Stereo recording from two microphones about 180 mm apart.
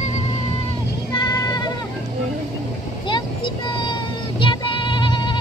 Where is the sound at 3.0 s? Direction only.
25° left (ahead or behind).